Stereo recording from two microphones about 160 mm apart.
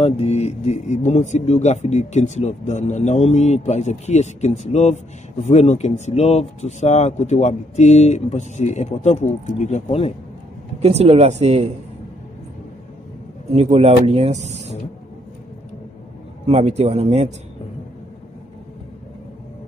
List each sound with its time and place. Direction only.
0.0 s speech: 40° left (ahead or behind)
10.8 s speech: 40° right (ahead or behind)
13.5 s speech: 40° right (ahead or behind)
16.4 s speech: 40° right (ahead or behind)